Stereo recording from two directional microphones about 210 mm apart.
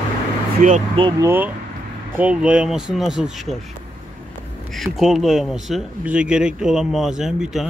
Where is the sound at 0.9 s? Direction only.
20° right (ahead or behind).